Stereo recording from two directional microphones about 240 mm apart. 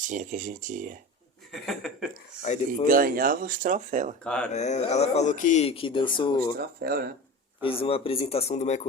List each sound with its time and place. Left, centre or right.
0.0 s speech: right
1.6 s speech: centre
2.4 s speech: left
2.8 s speech: right
4.2 s speech: centre
4.5 s speech: left
6.6 s speech: right
7.6 s speech: left